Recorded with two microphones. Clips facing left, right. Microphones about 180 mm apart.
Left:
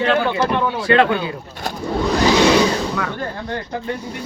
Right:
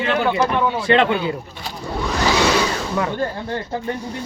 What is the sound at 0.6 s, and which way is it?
Speech, 20° right (ahead or behind).